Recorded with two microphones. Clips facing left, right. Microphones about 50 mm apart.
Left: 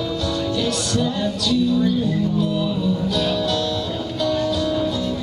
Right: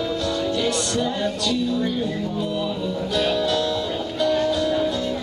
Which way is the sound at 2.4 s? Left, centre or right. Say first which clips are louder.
Left 3 dB; centre.